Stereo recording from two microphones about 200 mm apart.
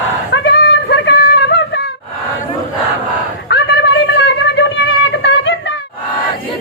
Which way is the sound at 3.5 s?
60° left (ahead or behind).